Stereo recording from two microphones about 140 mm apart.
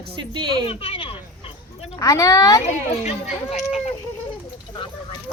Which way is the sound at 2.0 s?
25° left (ahead or behind).